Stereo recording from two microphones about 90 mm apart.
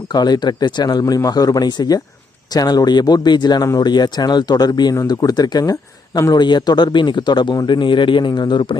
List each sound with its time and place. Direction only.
0.1 s speech: 50° left (ahead or behind)